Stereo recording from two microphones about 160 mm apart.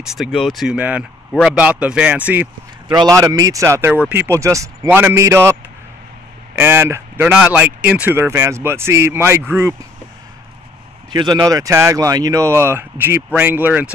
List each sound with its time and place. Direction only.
0.0 s speech: centre (ahead or behind)
2.9 s speech: 25° right (ahead or behind)
11.1 s speech: 30° right (ahead or behind); by 13.9 s 10° right (ahead or behind)